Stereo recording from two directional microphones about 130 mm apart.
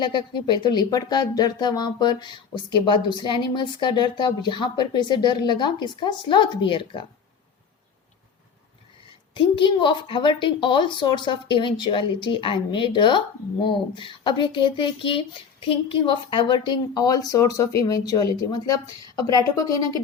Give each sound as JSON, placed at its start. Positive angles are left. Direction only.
{"t": 0.0, "sound": "speech", "side_deg": 40}
{"t": 9.3, "sound": "a woman's voice", "side_deg": 40}